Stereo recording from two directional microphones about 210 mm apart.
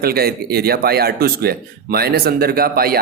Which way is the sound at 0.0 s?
50° right (ahead or behind).